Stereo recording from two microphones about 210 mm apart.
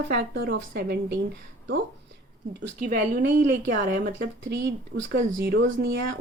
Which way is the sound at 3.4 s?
50° right (ahead or behind).